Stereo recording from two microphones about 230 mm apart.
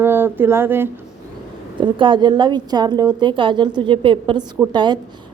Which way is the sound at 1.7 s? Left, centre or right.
Right.